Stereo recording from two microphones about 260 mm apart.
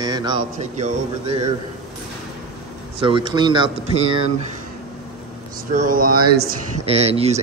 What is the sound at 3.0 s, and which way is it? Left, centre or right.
Speech, centre.